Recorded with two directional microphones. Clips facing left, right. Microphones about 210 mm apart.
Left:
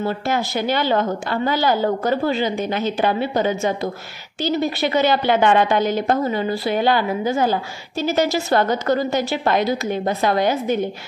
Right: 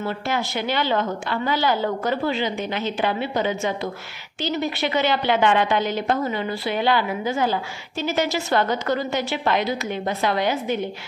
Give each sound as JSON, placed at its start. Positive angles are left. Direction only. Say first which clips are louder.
{"t": 0.0, "sound": "a woman's voice", "louder": "left 4 dB", "side_deg": 40}